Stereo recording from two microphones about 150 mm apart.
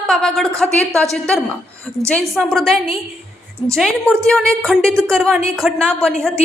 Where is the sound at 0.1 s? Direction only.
5° left (ahead or behind).